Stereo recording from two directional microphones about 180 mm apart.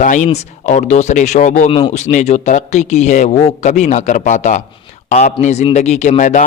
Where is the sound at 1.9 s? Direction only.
40° left (ahead or behind).